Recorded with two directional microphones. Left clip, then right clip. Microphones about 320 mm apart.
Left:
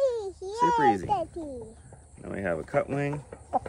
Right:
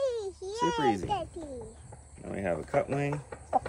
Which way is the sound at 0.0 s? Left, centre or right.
Left.